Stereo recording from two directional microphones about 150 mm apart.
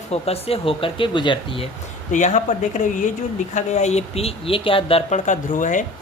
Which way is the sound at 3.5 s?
50° left (ahead or behind).